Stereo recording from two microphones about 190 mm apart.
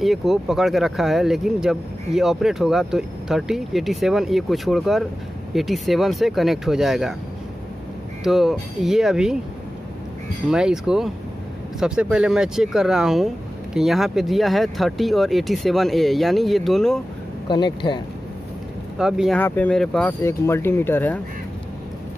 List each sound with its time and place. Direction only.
0.0 s speech: centre (ahead or behind)
8.2 s speech: centre (ahead or behind)
10.5 s speech: 5° right (ahead or behind)
17.5 s speech: 25° left (ahead or behind)
18.9 s speech: 5° right (ahead or behind)
19.3 s speech: 10° left (ahead or behind)